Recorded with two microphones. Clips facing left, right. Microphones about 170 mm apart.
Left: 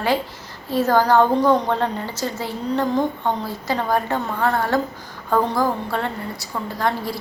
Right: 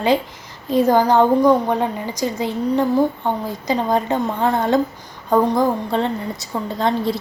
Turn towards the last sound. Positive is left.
turn(degrees=-20)  # may be behind; listen again after turning